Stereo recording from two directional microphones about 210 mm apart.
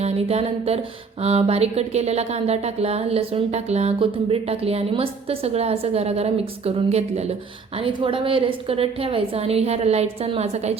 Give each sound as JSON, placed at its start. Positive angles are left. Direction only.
{"t": 0.0, "sound": "speech", "side_deg": -30}